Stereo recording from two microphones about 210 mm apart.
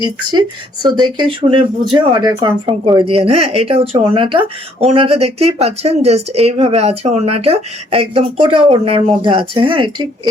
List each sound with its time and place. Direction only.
0.0 s speech: 20° right (ahead or behind)